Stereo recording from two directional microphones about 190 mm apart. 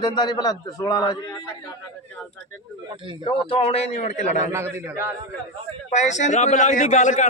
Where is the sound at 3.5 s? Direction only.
30° left (ahead or behind).